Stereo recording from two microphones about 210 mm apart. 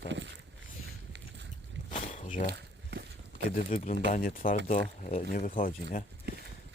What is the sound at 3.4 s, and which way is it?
Speech, 40° left (ahead or behind).